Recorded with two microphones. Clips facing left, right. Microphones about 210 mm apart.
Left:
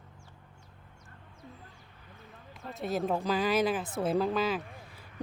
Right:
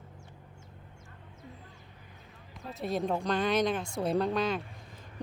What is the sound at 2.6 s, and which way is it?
Speech, centre (ahead or behind).